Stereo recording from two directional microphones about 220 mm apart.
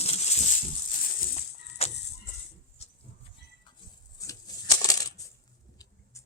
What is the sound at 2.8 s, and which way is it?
Goat, 30° left (ahead or behind).